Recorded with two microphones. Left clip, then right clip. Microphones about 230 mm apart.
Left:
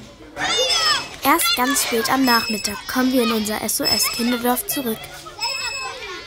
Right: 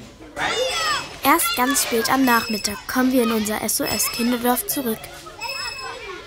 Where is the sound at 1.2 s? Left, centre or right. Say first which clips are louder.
Left 1 dB; centre.